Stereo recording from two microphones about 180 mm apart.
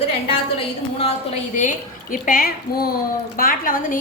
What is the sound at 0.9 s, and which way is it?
A woman's voice, 35° left (ahead or behind).